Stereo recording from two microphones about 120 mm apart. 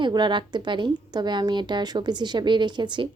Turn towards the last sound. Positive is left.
turn(degrees=-40)  # may be behind; listen again after turning